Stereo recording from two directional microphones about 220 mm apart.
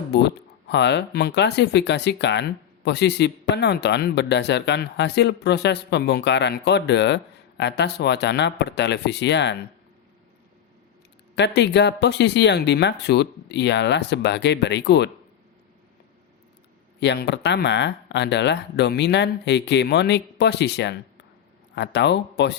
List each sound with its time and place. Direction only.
0.1 s speech: 50° left (ahead or behind)
11.3 s speech: 50° left (ahead or behind)
17.0 s speech: 50° left (ahead or behind)